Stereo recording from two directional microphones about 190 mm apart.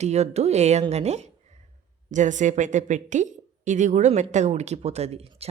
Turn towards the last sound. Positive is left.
turn(degrees=-35)  # may be behind; listen again after turning